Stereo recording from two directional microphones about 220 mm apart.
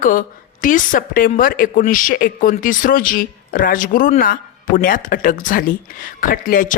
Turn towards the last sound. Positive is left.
turn(degrees=40)  # may be behind; listen again after turning